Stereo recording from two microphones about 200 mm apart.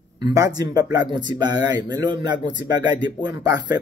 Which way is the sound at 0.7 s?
20° right (ahead or behind).